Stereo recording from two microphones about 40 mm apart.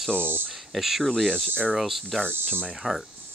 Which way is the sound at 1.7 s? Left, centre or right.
Centre.